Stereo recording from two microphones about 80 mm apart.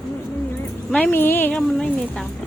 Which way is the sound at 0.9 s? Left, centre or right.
Centre.